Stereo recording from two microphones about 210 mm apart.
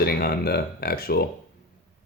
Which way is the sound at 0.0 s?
45° left (ahead or behind).